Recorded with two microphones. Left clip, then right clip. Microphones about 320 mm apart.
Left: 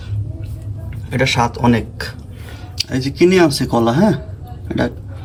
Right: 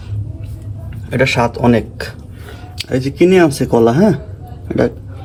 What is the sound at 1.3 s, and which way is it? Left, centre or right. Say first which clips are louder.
Speech: right 2 dB; left.